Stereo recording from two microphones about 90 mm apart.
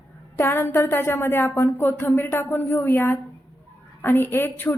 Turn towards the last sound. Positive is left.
turn(degrees=25)  # may be behind; listen again after turning